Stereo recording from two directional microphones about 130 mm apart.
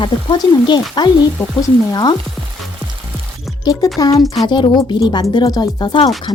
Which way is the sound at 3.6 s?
30° left (ahead or behind).